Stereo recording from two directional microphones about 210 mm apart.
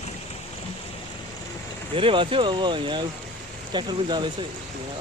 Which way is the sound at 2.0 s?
25° right (ahead or behind).